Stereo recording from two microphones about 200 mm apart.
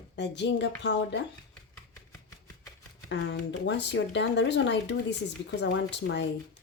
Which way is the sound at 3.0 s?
60° left (ahead or behind).